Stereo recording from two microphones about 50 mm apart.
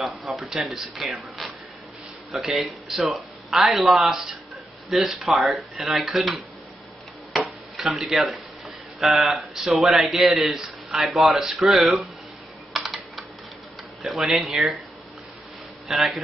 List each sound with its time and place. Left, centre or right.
0.0 s a man's voice: centre
1.4 s a sound: centre
2.3 s a man's voice: centre
7.3 s a sound: centre
9.6 s a man's voice: centre
12.7 s typing: centre
14.0 s a man's voice: centre
15.9 s a man's voice: centre